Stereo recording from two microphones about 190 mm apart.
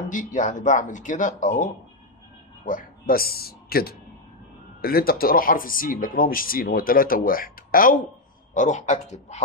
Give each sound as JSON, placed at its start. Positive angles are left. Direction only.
{"t": 0.0, "sound": "speech", "side_deg": 45}